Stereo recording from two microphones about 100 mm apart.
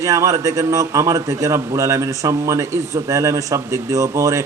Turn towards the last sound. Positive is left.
turn(degrees=-35)  # may be behind; listen again after turning